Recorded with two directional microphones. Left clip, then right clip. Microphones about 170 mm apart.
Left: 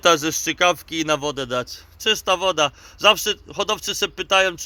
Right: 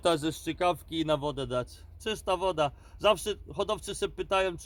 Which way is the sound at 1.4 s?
5° left (ahead or behind).